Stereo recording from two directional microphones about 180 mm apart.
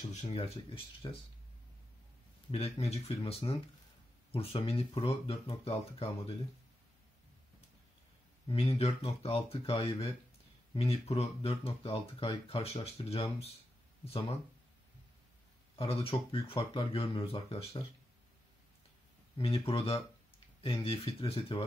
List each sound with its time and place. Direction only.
0.1 s speech: 35° left (ahead or behind)
2.5 s speech: 35° left (ahead or behind)
8.5 s speech: 35° left (ahead or behind)
15.7 s speech: 30° left (ahead or behind)
19.3 s speech: 30° left (ahead or behind)